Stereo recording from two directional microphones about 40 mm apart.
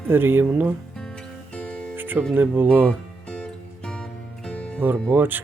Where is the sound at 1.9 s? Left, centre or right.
Right.